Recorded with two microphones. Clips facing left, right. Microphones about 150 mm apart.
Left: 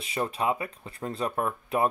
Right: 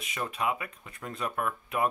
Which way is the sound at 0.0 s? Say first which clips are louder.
Left 4 dB; 30° left (ahead or behind).